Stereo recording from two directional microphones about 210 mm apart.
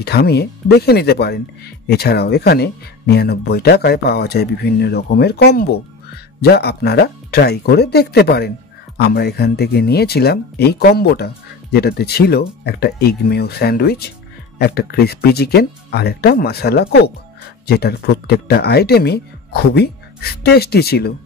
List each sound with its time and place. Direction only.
0.0 s speech: 50° left (ahead or behind)